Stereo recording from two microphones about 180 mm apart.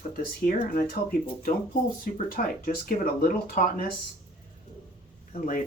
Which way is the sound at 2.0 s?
55° left (ahead or behind).